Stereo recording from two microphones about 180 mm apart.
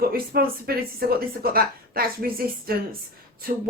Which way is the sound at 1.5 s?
55° right (ahead or behind).